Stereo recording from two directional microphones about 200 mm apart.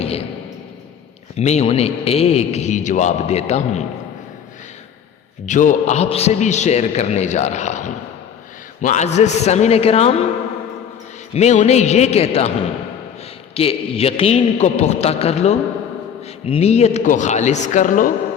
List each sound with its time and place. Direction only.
0.0 s a sound: 30° left (ahead or behind)
1.4 s a man's voice: 35° left (ahead or behind)
5.5 s a man's voice: 40° left (ahead or behind)
11.3 s a man's voice: 35° left (ahead or behind)
13.5 s a man's voice: 30° left (ahead or behind)